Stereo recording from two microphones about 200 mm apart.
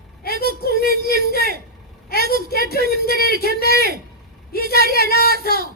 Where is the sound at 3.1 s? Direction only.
50° left (ahead or behind).